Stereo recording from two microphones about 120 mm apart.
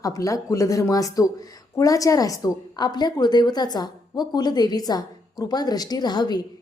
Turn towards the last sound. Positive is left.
turn(degrees=35)  # may be behind; listen again after turning